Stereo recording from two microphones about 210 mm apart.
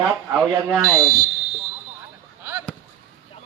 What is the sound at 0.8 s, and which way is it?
Speech, 15° right (ahead or behind).